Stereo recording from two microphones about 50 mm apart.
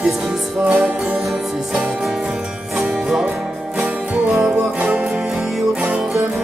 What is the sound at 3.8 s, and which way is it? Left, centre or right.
Music, right.